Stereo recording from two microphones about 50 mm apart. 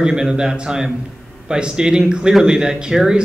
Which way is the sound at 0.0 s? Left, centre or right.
Centre.